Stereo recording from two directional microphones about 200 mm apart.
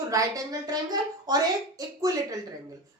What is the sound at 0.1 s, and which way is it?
A woman's voice, 15° right (ahead or behind).